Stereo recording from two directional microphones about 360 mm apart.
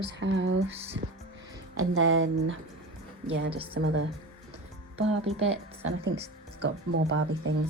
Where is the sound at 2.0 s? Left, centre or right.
Right.